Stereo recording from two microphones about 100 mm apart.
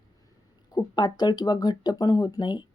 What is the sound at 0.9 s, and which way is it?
Speech, 45° left (ahead or behind).